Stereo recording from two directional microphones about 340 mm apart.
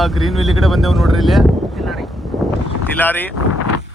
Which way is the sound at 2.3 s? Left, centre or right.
Centre.